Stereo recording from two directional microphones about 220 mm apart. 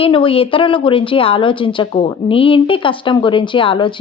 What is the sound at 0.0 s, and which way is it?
Speech, 25° left (ahead or behind).